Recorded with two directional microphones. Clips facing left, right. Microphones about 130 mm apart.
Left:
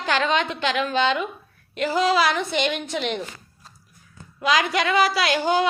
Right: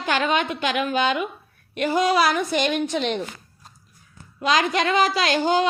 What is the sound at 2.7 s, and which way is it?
Speech, 20° right (ahead or behind).